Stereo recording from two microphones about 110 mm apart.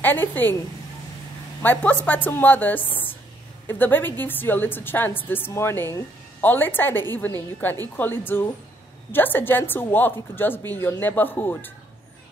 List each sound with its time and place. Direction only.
0.0 s a woman's voice: 15° left (ahead or behind)
1.6 s a woman's voice: 15° left (ahead or behind)